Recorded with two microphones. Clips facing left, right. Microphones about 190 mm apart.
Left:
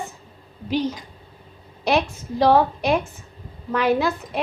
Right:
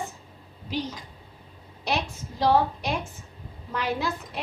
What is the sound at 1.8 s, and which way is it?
A woman's voice, 65° left (ahead or behind).